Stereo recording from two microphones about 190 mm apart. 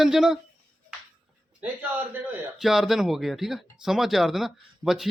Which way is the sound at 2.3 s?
Centre (ahead or behind).